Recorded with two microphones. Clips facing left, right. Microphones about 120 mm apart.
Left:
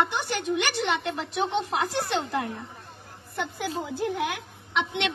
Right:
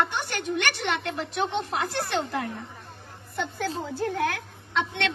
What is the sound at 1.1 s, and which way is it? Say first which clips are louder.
A woman's voice: left 1 dB; 10° left (ahead or behind).